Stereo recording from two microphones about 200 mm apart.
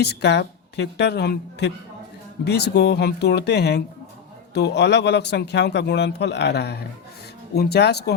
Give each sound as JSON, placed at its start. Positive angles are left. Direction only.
{"t": 0.0, "sound": "speech", "side_deg": 55}